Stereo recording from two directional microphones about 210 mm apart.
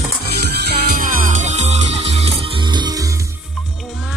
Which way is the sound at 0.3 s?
50° right (ahead or behind).